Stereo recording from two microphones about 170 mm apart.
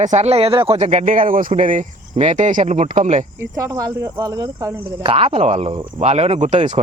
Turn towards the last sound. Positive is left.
turn(degrees=-40)  # may be behind; listen again after turning